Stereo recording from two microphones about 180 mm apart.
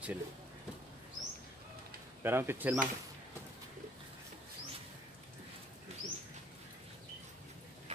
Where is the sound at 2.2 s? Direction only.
15° right (ahead or behind).